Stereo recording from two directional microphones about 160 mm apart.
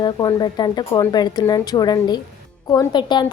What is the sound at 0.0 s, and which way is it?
A woman's voice, 25° left (ahead or behind).